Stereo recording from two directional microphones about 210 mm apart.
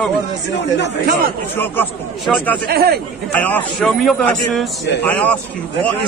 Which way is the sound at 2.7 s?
45° right (ahead or behind).